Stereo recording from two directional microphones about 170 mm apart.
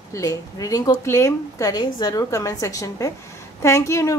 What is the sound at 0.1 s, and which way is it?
A woman's voice, 20° left (ahead or behind).